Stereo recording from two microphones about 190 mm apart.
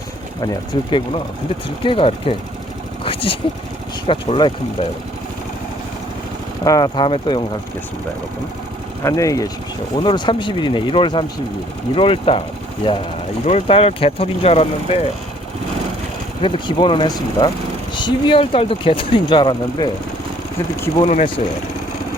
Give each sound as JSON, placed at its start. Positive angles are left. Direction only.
{"t": 0.4, "sound": "speech", "side_deg": 20}
{"t": 6.7, "sound": "speech", "side_deg": 20}
{"t": 9.0, "sound": "speech", "side_deg": 15}
{"t": 13.4, "sound": "speech", "side_deg": 30}
{"t": 16.4, "sound": "speech", "side_deg": 25}
{"t": 21.0, "sound": "speech", "side_deg": 30}